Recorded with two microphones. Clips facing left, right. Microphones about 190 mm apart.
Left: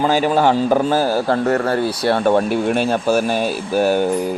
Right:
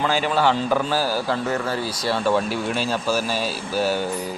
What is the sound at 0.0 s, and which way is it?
A man's voice, 40° left (ahead or behind).